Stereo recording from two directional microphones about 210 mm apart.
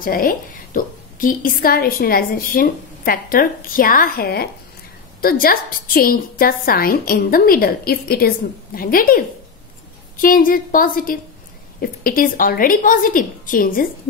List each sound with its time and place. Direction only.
0.0 s a woman's voice: 45° left (ahead or behind)